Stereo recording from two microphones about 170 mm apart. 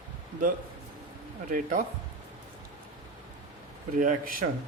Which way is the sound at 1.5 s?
50° right (ahead or behind).